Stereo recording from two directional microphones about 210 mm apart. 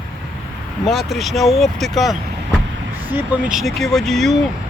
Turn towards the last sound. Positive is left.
turn(degrees=0)  # may be behind; listen again after turning